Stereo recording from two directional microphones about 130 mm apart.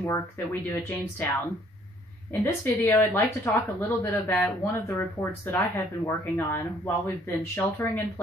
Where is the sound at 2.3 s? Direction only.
20° left (ahead or behind).